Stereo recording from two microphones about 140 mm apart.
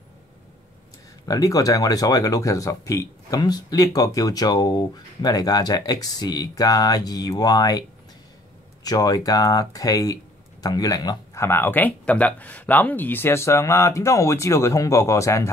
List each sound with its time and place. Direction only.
1.2 s speech: 25° left (ahead or behind)
8.8 s speech: 30° left (ahead or behind)